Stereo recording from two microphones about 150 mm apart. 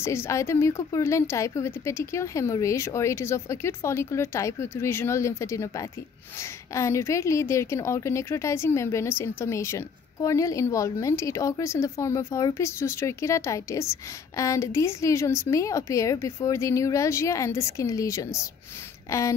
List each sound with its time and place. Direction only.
0.0 s a woman's voice: 15° left (ahead or behind)